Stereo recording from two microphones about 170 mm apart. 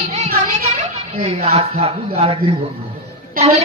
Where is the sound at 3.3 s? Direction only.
35° right (ahead or behind).